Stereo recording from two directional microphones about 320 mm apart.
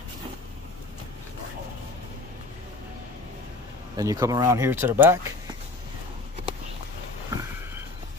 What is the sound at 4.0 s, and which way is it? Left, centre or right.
Speech, centre.